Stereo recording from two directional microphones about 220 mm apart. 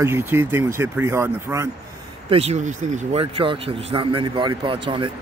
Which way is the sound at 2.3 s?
30° right (ahead or behind).